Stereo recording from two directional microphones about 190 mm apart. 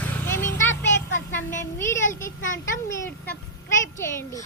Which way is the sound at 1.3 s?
10° left (ahead or behind).